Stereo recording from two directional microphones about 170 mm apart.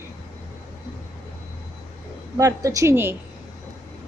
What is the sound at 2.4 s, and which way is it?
Speech, 20° right (ahead or behind).